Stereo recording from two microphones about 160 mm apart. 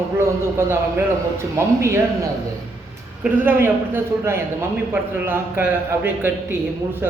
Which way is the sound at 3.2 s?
15° right (ahead or behind).